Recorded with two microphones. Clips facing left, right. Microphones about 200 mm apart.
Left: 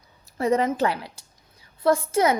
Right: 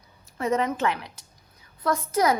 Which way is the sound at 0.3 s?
35° left (ahead or behind).